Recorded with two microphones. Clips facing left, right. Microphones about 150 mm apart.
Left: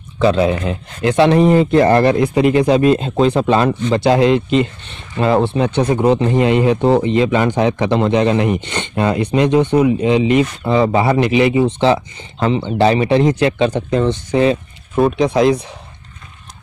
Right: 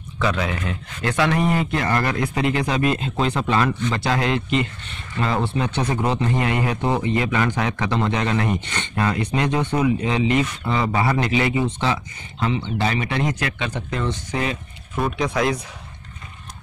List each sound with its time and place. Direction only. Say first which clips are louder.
0.2 s speech: left 10 dB; 30° left (ahead or behind)
12.4 s speech: left 8 dB; 40° left (ahead or behind)